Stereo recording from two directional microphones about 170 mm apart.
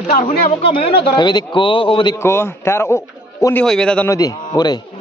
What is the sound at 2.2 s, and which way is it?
A man's voice, 15° left (ahead or behind).